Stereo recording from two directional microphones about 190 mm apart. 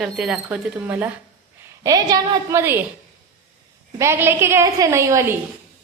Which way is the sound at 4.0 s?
15° right (ahead or behind).